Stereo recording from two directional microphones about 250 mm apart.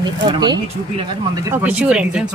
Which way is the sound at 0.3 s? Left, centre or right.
Centre.